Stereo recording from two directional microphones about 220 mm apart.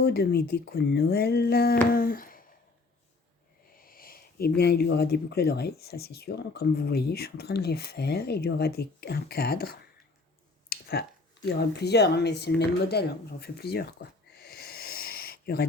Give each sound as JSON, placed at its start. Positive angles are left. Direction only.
{"t": 0.0, "sound": "speech", "side_deg": 45}
{"t": 1.9, "sound": "humming", "side_deg": 40}
{"t": 3.8, "sound": "speech", "side_deg": 40}
{"t": 10.7, "sound": "a sound", "side_deg": 45}
{"t": 11.4, "sound": "speech", "side_deg": 50}
{"t": 14.3, "sound": "a sound", "side_deg": 45}